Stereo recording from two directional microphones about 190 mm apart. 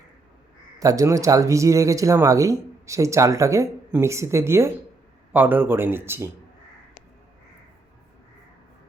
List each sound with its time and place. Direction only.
0.8 s speech: 20° right (ahead or behind)